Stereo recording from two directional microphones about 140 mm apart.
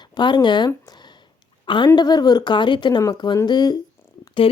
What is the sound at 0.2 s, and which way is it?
A woman's voice, 35° left (ahead or behind).